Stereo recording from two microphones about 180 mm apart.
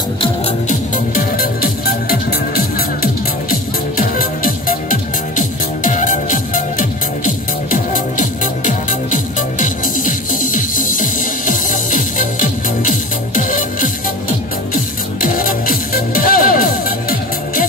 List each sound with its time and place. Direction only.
0.7 s music: 50° left (ahead or behind)